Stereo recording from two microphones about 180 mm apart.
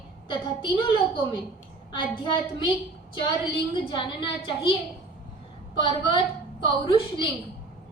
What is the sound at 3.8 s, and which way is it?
Speech, 25° left (ahead or behind).